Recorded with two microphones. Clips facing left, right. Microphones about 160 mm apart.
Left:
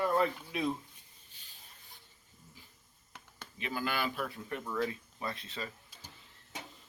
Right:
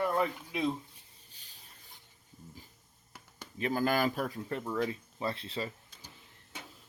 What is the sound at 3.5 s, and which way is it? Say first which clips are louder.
Speech: right 6 dB; 40° right (ahead or behind).